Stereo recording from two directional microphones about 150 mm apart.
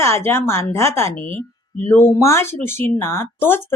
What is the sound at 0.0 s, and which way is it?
Speech, 15° left (ahead or behind).